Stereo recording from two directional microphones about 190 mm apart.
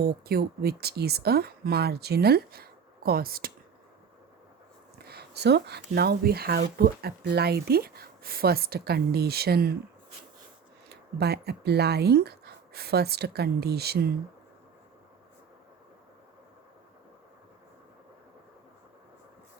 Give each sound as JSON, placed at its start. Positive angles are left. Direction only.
{"t": 0.0, "sound": "speech", "side_deg": -55}
{"t": 4.9, "sound": "speech", "side_deg": -55}
{"t": 10.8, "sound": "speech", "side_deg": -60}